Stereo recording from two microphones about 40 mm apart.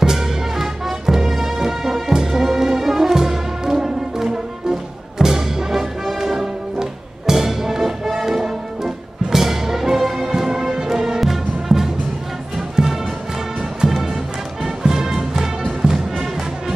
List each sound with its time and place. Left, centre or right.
0.0 s music: centre